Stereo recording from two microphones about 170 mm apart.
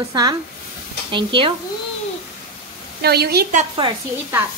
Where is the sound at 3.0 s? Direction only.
70° right (ahead or behind).